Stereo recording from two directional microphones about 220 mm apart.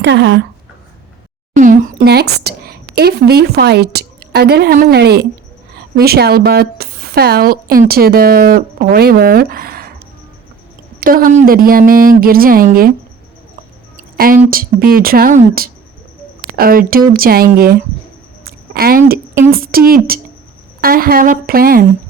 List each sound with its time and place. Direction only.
0.0 s speech: 55° right (ahead or behind)
1.5 s a woman's voice: 35° right (ahead or behind)
11.0 s speech: 40° right (ahead or behind)
13.9 s speech: 40° right (ahead or behind)
18.4 s a sound: 45° right (ahead or behind)
19.5 s speech: 40° right (ahead or behind)